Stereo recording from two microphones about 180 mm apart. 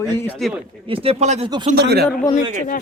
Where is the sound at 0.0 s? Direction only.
15° left (ahead or behind).